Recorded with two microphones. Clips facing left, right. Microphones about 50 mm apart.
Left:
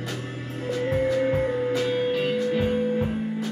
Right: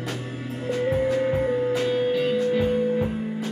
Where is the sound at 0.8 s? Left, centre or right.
Centre.